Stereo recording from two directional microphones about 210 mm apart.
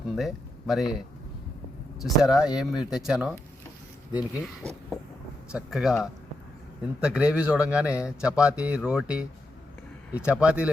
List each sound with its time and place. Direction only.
0.2 s speech: centre (ahead or behind)
2.0 s speech: centre (ahead or behind)